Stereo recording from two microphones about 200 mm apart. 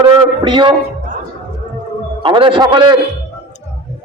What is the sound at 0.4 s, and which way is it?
Speech, 25° right (ahead or behind).